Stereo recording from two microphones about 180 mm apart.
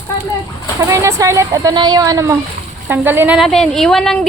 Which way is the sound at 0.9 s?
15° right (ahead or behind).